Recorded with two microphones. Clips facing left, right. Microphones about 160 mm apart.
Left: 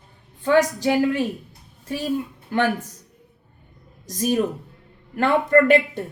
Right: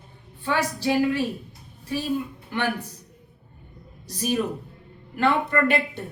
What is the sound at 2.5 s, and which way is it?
Speech, 45° left (ahead or behind).